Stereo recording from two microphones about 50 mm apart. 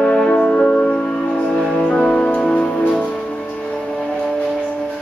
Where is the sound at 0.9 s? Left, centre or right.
Centre.